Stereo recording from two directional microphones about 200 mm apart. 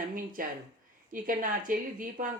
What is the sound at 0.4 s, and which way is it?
Speech, 45° right (ahead or behind).